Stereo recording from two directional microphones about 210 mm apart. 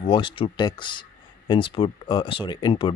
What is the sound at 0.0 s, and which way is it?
Speech, 25° left (ahead or behind).